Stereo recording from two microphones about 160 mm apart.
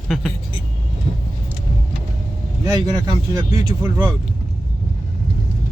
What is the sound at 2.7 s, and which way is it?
Speech, 25° right (ahead or behind).